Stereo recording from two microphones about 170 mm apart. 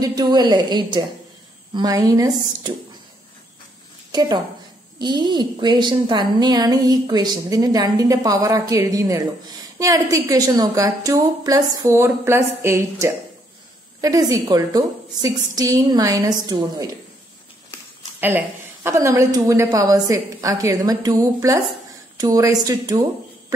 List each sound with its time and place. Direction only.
0.0 s a woman's voice: 25° right (ahead or behind)
4.1 s a woman's voice: 25° right (ahead or behind)
18.2 s a woman's voice: 15° right (ahead or behind)